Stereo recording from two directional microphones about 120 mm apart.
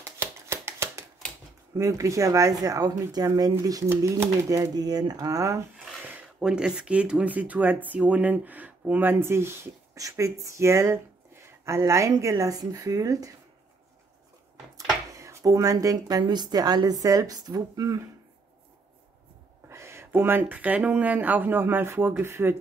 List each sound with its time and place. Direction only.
0.0 s a sound: 20° right (ahead or behind)
1.8 s speech: 25° right (ahead or behind)
3.9 s speech: 20° right (ahead or behind)
6.4 s speech: 5° right (ahead or behind); by 13.3 s 30° right (ahead or behind)
14.8 s speech: 30° right (ahead or behind)
19.7 s speech: 20° right (ahead or behind)